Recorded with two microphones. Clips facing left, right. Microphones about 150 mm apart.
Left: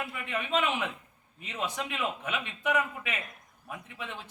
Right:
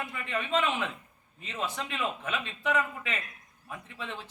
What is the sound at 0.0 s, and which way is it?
A man's voice, 10° left (ahead or behind).